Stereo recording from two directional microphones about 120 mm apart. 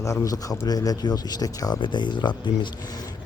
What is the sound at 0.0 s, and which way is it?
A man's voice, 25° left (ahead or behind).